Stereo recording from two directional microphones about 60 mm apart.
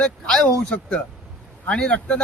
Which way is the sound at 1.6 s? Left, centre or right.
Centre.